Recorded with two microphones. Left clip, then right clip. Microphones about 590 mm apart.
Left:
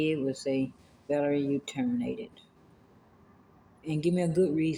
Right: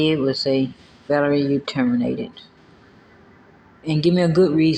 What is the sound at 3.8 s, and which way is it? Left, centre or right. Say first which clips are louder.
Speech: right 11 dB; left.